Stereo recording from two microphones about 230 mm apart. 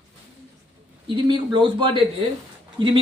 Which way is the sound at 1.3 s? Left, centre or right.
Right.